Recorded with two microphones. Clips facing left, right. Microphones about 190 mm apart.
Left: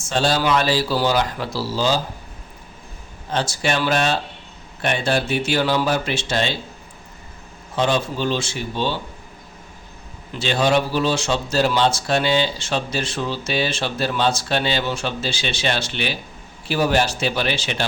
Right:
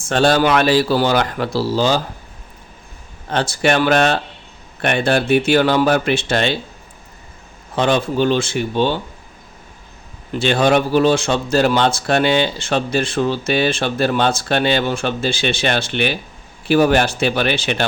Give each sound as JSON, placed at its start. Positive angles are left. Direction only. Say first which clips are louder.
{"t": 0.1, "sound": "speech", "louder": "right 5 dB", "side_deg": -60}
{"t": 3.3, "sound": "speech", "louder": "right 5 dB", "side_deg": -60}
{"t": 7.8, "sound": "speech", "louder": "right 4 dB", "side_deg": -60}
{"t": 10.3, "sound": "speech", "louder": "right 4 dB", "side_deg": -55}